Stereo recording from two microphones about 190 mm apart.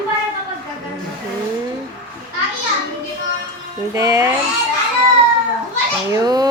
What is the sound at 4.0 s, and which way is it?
Speech, 20° right (ahead or behind).